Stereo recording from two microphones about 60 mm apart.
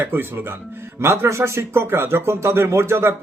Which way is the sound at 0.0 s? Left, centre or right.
Right.